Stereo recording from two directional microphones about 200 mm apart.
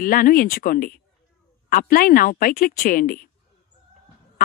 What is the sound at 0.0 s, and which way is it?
A woman's voice, 45° left (ahead or behind).